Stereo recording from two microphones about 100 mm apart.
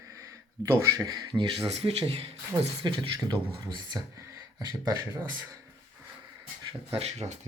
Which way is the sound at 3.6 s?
45° right (ahead or behind).